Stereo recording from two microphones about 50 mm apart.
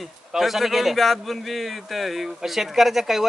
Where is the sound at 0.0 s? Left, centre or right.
Centre.